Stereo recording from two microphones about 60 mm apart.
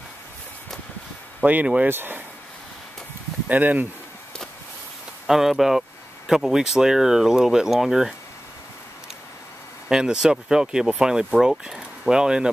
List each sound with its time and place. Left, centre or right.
1.4 s speech: right
3.4 s speech: right
5.2 s speech: centre
9.8 s speech: centre